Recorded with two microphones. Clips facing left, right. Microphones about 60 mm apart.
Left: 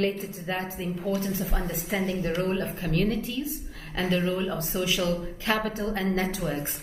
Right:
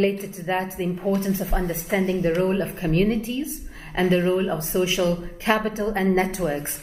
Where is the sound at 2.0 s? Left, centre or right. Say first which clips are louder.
Right 7 dB; right.